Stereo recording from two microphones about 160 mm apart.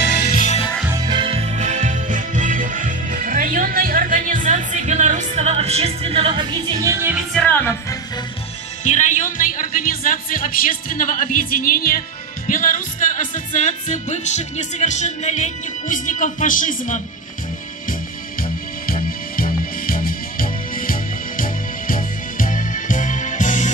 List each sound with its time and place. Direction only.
0.0 s music: 85° left
0.8 s music: 25° right (ahead or behind)
6.8 s music: 15° right (ahead or behind)
7.3 s music: 10° left (ahead or behind)
8.8 s music: 50° left (ahead or behind)
9.8 s music: 60° left (ahead or behind)
18.9 s music: 65° left (ahead or behind)